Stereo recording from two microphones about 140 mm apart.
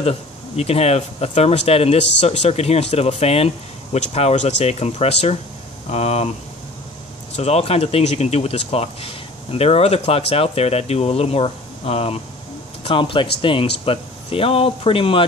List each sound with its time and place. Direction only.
0.0 s speech: 45° left (ahead or behind)
7.3 s speech: 50° left (ahead or behind)